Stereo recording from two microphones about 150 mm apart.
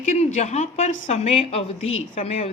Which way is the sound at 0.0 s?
55° left (ahead or behind).